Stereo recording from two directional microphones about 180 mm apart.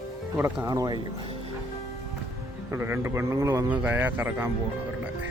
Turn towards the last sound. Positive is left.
turn(degrees=-10)  # may be behind; listen again after turning